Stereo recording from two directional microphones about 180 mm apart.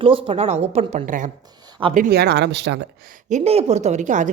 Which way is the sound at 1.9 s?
55° right (ahead or behind).